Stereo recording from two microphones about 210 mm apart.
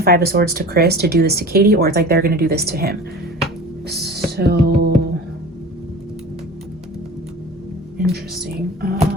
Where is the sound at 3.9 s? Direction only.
50° right (ahead or behind).